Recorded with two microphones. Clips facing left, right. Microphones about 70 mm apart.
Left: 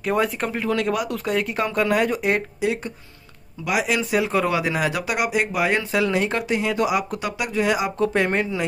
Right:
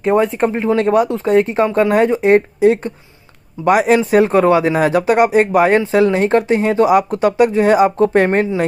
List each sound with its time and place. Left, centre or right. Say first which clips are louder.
0.0 s a man's voice: right 8 dB; right